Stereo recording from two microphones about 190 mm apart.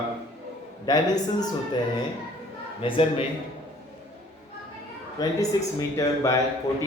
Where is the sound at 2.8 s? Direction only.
30° left (ahead or behind).